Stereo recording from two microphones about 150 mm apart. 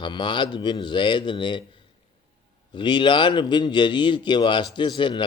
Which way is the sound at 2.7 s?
30° left (ahead or behind).